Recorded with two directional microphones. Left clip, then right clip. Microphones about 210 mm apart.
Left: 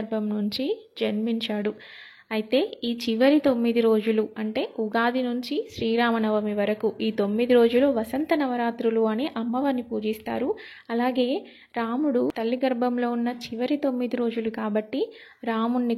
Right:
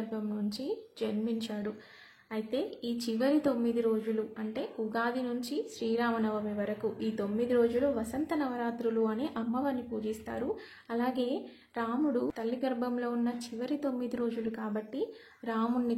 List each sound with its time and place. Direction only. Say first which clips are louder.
0.1 s a woman's voice: left 9 dB; 30° left (ahead or behind)